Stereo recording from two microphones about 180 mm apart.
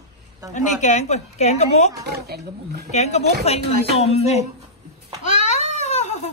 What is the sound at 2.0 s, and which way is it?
Speech, 65° right (ahead or behind).